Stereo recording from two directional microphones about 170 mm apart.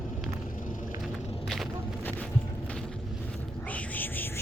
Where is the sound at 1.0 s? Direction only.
Centre (ahead or behind).